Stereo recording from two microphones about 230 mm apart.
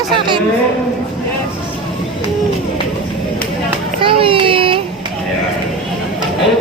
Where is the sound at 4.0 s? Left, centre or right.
Right.